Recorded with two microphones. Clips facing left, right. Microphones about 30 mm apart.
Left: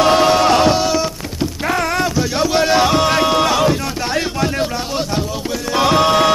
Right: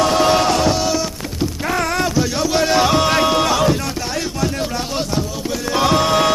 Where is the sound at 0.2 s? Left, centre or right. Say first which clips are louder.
Left 2 dB; centre.